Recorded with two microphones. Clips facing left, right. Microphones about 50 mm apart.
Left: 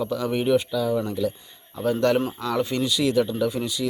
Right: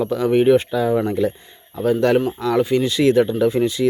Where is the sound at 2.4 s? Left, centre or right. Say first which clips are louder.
Right 7 dB; centre.